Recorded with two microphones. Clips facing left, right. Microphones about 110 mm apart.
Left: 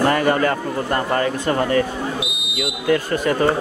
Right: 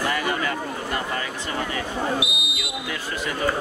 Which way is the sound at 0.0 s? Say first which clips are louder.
Left 8 dB; 50° left (ahead or behind).